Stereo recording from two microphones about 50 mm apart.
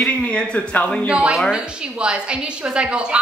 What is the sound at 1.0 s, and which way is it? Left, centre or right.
A woman's voice, right.